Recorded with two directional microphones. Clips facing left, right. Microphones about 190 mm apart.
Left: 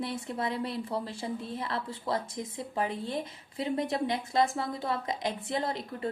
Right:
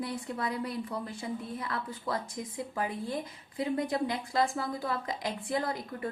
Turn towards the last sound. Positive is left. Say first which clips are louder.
# left 1 dB
turn(degrees=25)  # may be behind; listen again after turning